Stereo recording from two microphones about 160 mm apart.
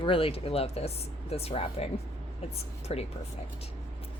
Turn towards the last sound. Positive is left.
turn(degrees=40)  # may be behind; listen again after turning